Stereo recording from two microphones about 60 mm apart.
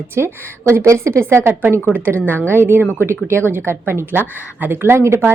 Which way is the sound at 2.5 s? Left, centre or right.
Right.